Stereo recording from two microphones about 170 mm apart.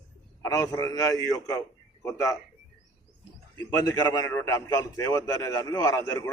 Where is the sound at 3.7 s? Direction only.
20° left (ahead or behind).